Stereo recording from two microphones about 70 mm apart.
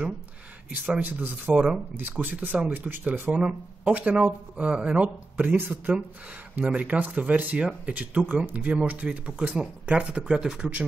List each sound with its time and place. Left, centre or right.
1.0 s speech: right; by 10.7 s centre